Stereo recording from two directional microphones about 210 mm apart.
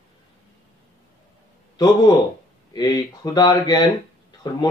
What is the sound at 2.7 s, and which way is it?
Speech, 20° left (ahead or behind).